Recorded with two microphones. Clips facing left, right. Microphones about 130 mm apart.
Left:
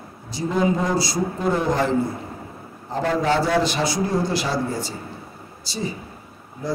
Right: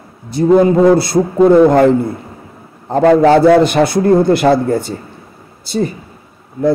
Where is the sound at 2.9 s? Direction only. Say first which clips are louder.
Right 13 dB; 75° right (ahead or behind).